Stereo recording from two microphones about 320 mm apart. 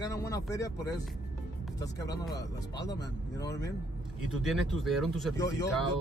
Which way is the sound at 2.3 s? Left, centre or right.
Centre.